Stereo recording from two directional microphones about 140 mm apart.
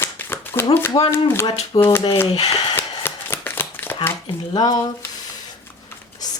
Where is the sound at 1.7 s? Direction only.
35° left (ahead or behind).